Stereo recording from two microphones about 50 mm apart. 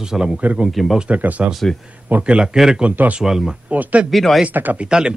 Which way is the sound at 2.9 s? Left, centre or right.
Right.